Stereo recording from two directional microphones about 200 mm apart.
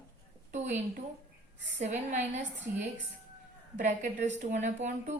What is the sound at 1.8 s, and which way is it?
Speech, 35° right (ahead or behind).